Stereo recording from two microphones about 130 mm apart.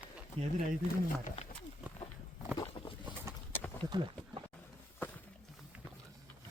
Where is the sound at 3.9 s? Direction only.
40° right (ahead or behind).